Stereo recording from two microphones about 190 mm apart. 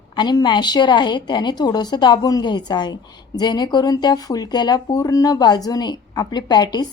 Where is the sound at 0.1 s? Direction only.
20° left (ahead or behind).